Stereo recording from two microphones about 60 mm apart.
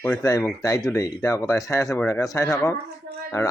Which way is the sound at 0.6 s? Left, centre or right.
Left.